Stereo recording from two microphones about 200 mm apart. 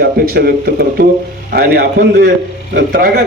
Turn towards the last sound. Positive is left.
turn(degrees=-50)  # may be behind; listen again after turning